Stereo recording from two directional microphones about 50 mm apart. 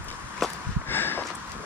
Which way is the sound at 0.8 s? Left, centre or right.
Left.